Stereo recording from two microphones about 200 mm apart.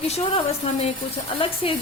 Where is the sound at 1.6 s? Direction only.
25° left (ahead or behind).